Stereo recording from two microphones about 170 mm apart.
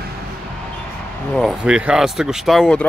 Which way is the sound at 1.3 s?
Centre (ahead or behind).